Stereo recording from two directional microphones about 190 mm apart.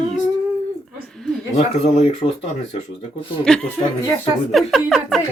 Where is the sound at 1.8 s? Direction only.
35° left (ahead or behind).